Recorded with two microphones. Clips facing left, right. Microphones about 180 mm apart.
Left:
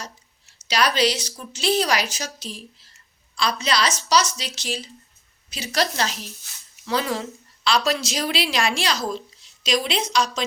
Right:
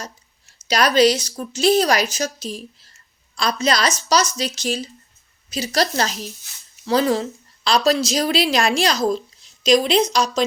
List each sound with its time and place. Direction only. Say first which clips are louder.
0.7 s a woman's voice: right 6 dB; 45° right (ahead or behind)